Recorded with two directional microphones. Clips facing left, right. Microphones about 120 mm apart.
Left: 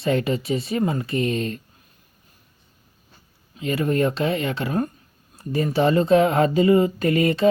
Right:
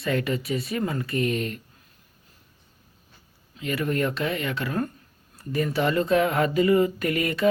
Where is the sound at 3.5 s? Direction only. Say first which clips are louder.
Left 4 dB; 25° left (ahead or behind).